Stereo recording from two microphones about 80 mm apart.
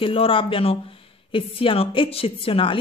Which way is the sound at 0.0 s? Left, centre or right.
Left.